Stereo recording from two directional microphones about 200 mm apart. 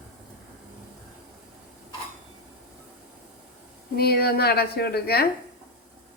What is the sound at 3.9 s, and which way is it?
A woman's voice, 50° left (ahead or behind).